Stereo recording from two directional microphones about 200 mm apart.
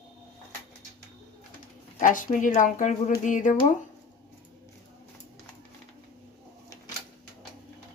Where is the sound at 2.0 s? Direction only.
40° left (ahead or behind).